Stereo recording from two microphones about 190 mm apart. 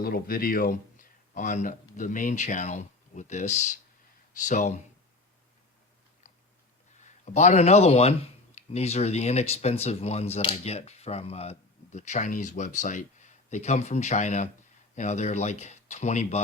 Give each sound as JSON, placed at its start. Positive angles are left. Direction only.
{"t": 0.0, "sound": "a man's voice", "side_deg": 50}
{"t": 7.0, "sound": "speech", "side_deg": 40}